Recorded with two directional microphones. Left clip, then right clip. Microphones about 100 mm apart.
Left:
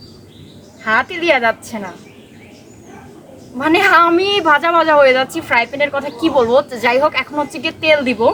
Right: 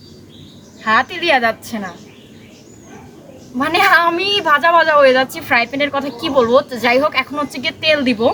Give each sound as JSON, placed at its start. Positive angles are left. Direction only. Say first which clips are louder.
{"t": 0.9, "sound": "a woman's voice", "louder": "even", "side_deg": 10}
{"t": 3.6, "sound": "a woman's voice", "louder": "left 1 dB", "side_deg": 20}